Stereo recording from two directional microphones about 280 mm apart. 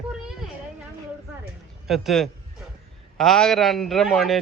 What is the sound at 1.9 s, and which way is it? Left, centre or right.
A man's voice, centre.